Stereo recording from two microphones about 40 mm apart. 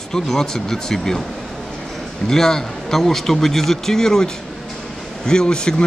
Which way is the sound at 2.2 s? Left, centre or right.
Centre.